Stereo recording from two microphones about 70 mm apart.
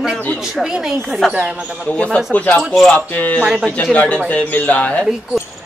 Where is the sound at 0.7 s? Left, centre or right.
Centre.